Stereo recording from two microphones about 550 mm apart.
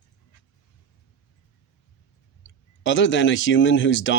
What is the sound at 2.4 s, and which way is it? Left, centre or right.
Speech, centre.